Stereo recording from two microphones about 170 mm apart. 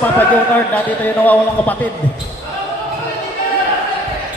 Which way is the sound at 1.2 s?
10° left (ahead or behind).